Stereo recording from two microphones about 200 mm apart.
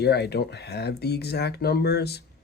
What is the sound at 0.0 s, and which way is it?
Speech, 55° left (ahead or behind).